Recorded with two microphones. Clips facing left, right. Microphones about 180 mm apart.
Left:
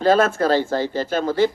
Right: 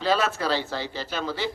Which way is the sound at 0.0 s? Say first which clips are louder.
Left 8 dB; 50° left (ahead or behind).